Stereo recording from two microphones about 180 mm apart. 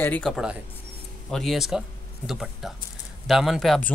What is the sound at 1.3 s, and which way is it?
Speech, centre (ahead or behind).